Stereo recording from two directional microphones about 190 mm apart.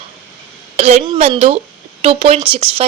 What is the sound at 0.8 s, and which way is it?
A woman's voice, 35° right (ahead or behind).